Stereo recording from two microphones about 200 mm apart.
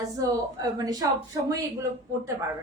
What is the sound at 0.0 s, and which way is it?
A woman's voice, 15° right (ahead or behind).